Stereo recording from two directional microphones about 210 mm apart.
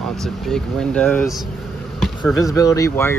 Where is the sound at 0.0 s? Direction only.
Centre (ahead or behind).